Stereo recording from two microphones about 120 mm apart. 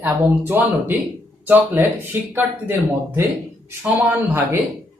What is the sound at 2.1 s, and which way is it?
Speech, 15° right (ahead or behind).